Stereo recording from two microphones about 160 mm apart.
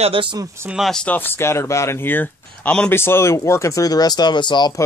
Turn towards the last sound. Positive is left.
turn(degrees=25)  # may be behind; listen again after turning